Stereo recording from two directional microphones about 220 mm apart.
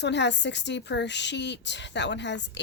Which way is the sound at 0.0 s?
50° left (ahead or behind).